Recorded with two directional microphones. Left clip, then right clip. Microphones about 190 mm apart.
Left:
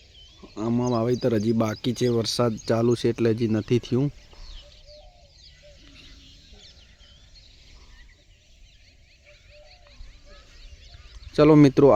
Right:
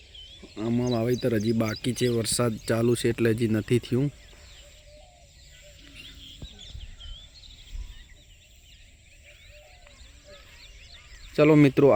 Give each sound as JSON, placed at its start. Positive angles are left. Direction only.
{"t": 0.4, "sound": "speech", "side_deg": 10}
{"t": 11.3, "sound": "speech", "side_deg": 15}